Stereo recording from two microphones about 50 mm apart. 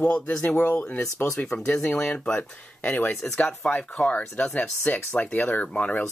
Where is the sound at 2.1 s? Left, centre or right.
Left.